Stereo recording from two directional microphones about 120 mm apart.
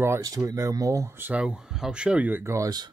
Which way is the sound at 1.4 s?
5° right (ahead or behind).